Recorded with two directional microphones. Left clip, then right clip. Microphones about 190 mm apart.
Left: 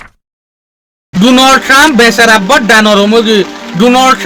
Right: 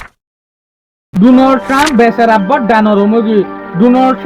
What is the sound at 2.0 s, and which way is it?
A man's voice, 15° left (ahead or behind).